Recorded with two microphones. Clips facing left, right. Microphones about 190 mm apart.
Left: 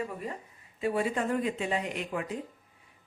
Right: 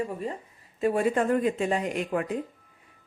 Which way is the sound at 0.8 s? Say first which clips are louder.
Right 5 dB; 45° right (ahead or behind).